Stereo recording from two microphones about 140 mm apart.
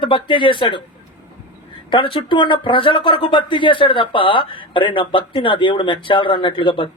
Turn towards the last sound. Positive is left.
turn(degrees=40)  # may be behind; listen again after turning